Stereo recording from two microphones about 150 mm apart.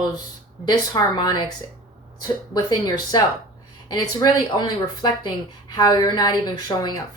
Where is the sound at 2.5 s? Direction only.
30° left (ahead or behind).